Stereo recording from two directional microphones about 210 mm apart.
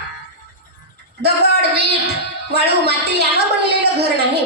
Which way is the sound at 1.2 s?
50° right (ahead or behind).